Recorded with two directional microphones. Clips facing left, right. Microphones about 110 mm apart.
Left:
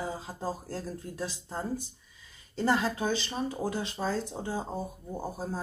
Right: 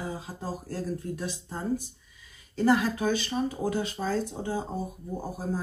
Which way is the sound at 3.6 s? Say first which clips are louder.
Right 2 dB; centre (ahead or behind).